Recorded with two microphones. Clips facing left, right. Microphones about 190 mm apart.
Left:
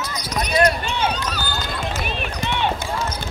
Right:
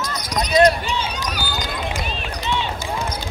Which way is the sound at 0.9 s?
60° left (ahead or behind).